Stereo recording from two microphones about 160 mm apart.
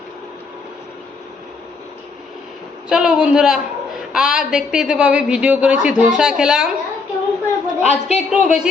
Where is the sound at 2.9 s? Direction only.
5° right (ahead or behind).